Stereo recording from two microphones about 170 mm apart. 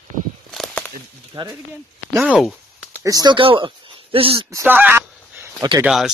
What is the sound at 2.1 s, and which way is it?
Speech, 5° right (ahead or behind).